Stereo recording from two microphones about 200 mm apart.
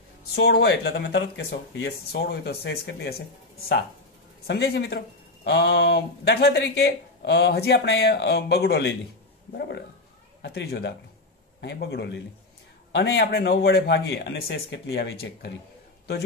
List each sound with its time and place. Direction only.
0.4 s speech: 60° left (ahead or behind)